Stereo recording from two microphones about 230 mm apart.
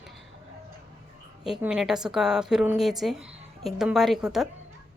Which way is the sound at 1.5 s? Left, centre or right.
Centre.